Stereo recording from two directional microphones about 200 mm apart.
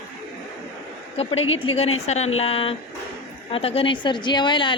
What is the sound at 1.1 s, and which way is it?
A woman's voice, 30° left (ahead or behind).